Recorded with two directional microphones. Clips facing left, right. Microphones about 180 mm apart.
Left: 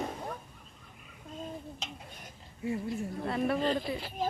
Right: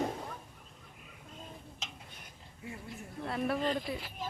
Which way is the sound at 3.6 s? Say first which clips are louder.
Left 3 dB; 30° left (ahead or behind).